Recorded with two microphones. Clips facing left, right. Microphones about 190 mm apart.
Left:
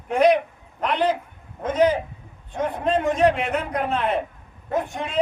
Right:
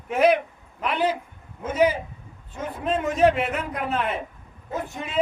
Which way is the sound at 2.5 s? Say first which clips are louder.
Left 7 dB; 75° left (ahead or behind).